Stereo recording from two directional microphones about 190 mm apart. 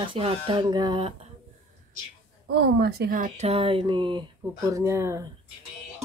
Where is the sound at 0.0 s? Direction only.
25° right (ahead or behind).